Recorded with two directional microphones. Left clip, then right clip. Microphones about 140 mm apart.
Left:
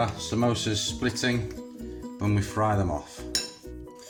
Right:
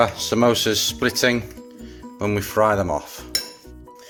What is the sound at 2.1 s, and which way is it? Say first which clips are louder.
Speech: right 9 dB; 70° right (ahead or behind).